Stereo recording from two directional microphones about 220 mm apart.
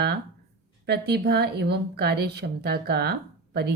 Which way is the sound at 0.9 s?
45° right (ahead or behind).